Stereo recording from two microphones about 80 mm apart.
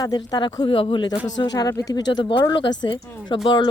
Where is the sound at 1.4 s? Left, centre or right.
Left.